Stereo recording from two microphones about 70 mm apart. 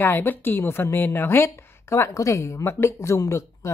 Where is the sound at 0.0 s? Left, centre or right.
Left.